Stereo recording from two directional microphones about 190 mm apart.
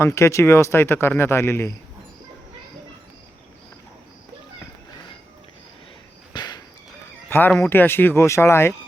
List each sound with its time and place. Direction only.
0.0 s speech: 15° left (ahead or behind)
6.3 s insect: 20° left (ahead or behind)
7.3 s speech: 10° left (ahead or behind)